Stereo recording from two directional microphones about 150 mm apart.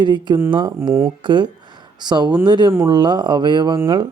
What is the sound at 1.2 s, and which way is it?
Speech, 30° right (ahead or behind).